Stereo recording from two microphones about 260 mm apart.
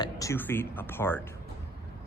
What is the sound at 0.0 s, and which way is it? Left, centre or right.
Speech, centre.